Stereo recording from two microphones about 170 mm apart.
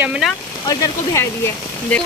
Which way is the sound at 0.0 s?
5° right (ahead or behind).